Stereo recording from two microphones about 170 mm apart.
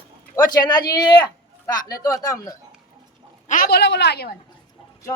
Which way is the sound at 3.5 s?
65° left (ahead or behind).